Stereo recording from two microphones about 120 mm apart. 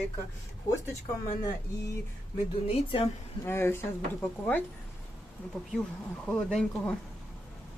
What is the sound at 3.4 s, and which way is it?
Speech, 20° left (ahead or behind).